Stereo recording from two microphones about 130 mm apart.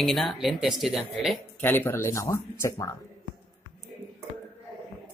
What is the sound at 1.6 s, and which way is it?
Speech, 15° left (ahead or behind).